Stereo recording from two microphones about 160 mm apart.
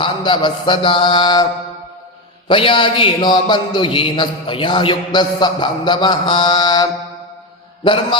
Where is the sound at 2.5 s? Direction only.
30° left (ahead or behind).